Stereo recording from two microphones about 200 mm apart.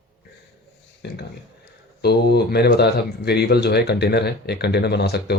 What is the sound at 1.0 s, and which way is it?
Speech, 55° left (ahead or behind).